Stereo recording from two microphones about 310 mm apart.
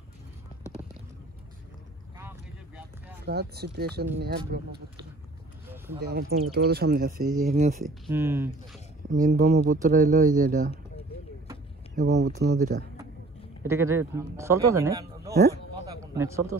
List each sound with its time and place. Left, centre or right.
2.1 s boat: centre
3.3 s speech: right
5.9 s speech: right
7.8 s speech: centre
9.1 s speech: right
11.9 s speech: right
13.7 s speech: centre